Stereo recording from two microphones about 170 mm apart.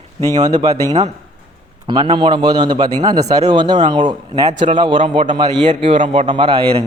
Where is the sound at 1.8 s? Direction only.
30° right (ahead or behind).